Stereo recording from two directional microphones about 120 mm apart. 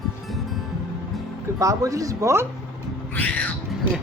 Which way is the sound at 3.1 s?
10° left (ahead or behind).